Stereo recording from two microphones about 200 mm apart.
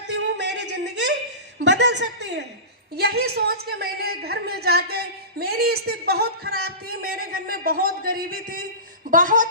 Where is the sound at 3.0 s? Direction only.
55° right (ahead or behind).